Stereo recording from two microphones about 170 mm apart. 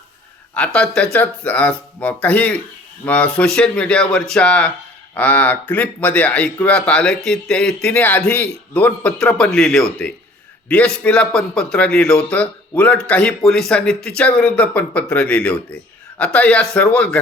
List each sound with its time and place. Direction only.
0.5 s a man's voice: 5° left (ahead or behind)